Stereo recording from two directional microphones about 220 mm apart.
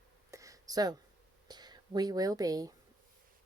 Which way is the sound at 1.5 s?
20° right (ahead or behind).